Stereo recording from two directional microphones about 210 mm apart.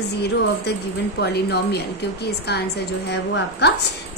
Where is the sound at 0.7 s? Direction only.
50° left (ahead or behind).